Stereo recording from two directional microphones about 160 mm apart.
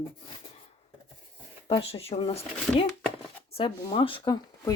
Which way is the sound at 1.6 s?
35° left (ahead or behind).